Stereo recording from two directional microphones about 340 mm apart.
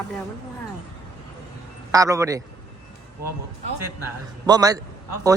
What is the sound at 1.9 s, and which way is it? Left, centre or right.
Speech, centre.